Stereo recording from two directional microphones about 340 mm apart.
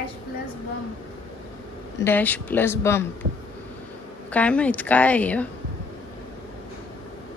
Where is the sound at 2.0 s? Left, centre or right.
Centre.